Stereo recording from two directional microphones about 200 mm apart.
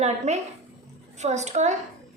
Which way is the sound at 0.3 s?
35° right (ahead or behind).